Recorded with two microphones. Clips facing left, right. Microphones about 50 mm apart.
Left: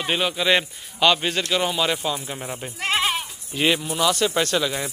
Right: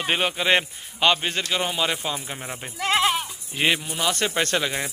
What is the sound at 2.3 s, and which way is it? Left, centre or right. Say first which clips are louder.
Speech: left 2 dB; centre.